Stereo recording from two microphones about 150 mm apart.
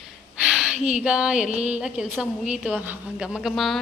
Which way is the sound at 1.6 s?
5° right (ahead or behind).